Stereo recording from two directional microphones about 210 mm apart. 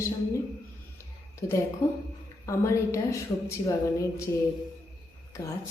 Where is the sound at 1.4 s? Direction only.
15° left (ahead or behind).